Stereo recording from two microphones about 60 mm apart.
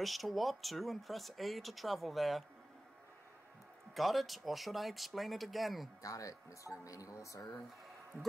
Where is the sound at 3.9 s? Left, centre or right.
Centre.